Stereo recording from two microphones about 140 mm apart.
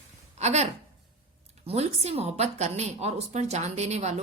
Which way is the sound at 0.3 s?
50° right (ahead or behind).